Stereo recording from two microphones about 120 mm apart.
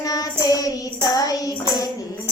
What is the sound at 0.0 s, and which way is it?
Child singing, 30° left (ahead or behind).